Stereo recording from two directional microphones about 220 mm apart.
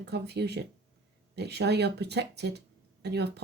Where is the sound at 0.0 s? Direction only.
50° right (ahead or behind).